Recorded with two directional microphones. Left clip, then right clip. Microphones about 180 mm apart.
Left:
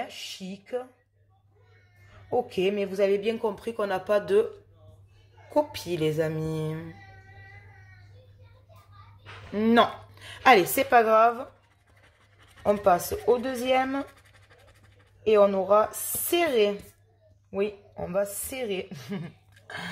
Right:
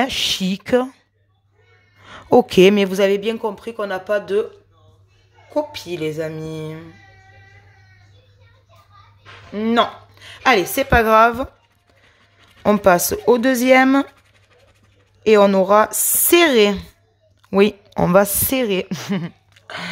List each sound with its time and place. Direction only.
0.0 s speech: 60° right (ahead or behind)
2.2 s speech: 55° right (ahead or behind)
3.0 s speech: 30° right (ahead or behind); by 4.5 s 5° right (ahead or behind)
5.5 s speech: 5° right (ahead or behind)
9.5 s a woman's voice: 5° right (ahead or behind)
10.9 s a woman's voice: 30° right (ahead or behind)
12.6 s a woman's voice: 45° right (ahead or behind)
15.2 s a woman's voice: 45° right (ahead or behind)
17.5 s a woman's voice: 55° right (ahead or behind)
19.6 s a sound: 25° right (ahead or behind)